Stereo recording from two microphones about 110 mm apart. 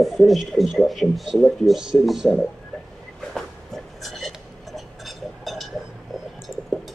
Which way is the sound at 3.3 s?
Centre (ahead or behind).